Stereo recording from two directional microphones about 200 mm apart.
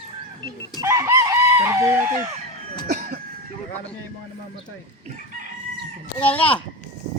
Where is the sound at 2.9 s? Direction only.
40° right (ahead or behind).